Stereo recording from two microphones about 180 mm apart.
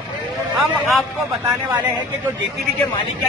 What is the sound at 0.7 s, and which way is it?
A man's voice, 10° right (ahead or behind).